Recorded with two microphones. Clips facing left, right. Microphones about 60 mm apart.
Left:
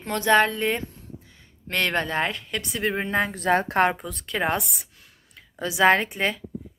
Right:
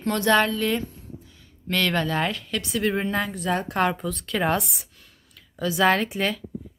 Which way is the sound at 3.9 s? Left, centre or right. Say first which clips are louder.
Right 2 dB; centre.